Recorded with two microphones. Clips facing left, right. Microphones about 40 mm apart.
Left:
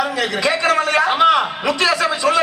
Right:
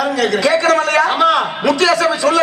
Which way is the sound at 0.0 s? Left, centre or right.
Centre.